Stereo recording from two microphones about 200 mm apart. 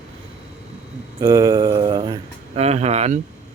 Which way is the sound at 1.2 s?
15° right (ahead or behind).